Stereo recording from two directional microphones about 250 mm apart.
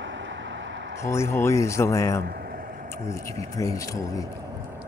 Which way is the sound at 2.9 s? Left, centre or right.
Centre.